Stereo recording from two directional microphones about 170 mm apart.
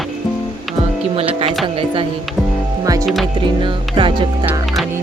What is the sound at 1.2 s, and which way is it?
Speech, 35° right (ahead or behind).